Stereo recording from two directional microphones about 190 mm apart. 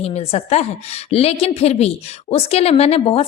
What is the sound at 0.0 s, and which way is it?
A woman's voice, 30° left (ahead or behind).